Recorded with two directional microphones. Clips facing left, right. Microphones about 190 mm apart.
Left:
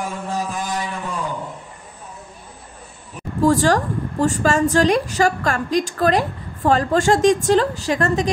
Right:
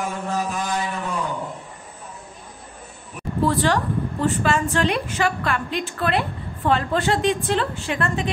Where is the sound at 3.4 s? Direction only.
45° left (ahead or behind).